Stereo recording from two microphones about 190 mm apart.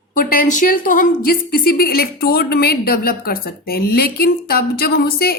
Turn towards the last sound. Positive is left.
turn(degrees=55)  # may be behind; listen again after turning